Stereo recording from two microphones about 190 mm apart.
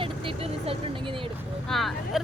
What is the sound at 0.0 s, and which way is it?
Vehicle, 30° right (ahead or behind).